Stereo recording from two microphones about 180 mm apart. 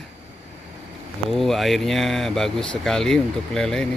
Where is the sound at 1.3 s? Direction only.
Centre (ahead or behind).